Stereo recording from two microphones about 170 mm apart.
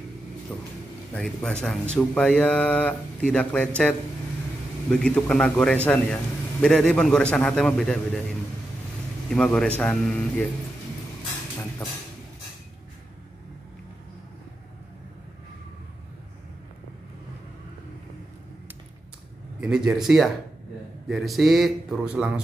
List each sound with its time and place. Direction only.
0.5 s a man's voice: 10° left (ahead or behind)
9.3 s a man's voice: 5° left (ahead or behind)
19.6 s a man's voice: 5° right (ahead or behind)